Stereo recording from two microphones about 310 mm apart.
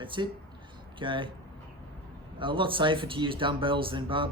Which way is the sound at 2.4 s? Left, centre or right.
Centre.